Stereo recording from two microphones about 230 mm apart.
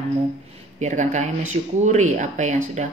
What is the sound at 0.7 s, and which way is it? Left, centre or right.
Speech, right.